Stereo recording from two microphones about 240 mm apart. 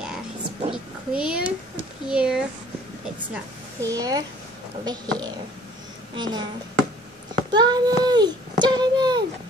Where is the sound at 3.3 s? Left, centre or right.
Centre.